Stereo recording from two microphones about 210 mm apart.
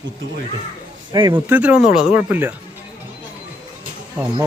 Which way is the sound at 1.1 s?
20° right (ahead or behind).